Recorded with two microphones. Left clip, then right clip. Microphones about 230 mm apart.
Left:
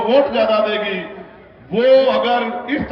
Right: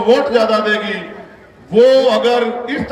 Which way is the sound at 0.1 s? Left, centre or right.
Right.